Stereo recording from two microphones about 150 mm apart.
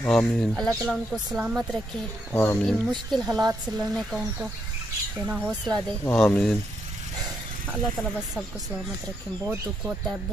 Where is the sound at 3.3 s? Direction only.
25° right (ahead or behind).